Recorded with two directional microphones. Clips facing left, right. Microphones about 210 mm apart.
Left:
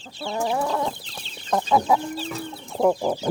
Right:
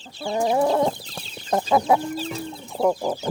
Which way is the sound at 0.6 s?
35° right (ahead or behind).